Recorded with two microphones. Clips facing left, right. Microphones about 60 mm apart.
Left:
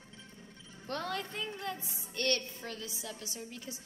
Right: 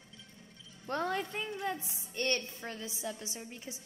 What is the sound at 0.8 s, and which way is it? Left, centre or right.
A woman's voice, centre.